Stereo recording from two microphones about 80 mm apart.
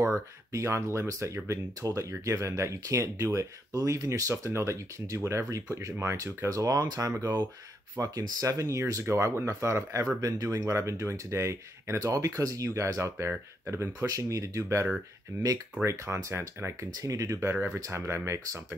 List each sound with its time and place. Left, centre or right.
0.0 s speech: right